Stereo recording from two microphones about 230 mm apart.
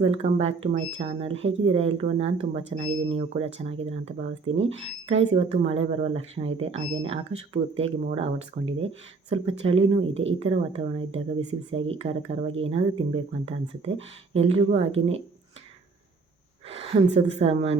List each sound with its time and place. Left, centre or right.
0.0 s speech: right
17.3 s speech: right